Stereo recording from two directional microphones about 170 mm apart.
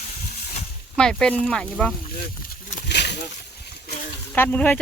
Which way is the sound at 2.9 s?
80° left.